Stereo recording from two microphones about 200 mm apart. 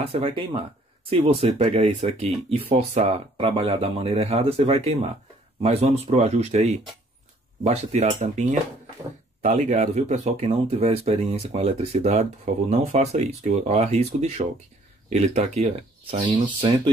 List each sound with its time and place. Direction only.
0.0 s speech: 30° right (ahead or behind)